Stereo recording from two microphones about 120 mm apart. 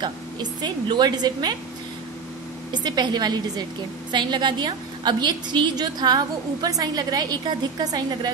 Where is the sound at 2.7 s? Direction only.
35° right (ahead or behind).